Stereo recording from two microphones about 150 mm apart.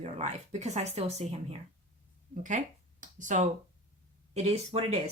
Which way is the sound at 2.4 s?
60° right (ahead or behind).